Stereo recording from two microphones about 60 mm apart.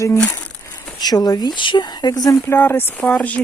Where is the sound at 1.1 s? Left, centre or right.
Left.